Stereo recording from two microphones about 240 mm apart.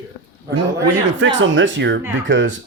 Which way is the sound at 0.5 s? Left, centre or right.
Right.